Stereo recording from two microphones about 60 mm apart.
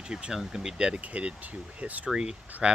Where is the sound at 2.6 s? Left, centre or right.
Centre.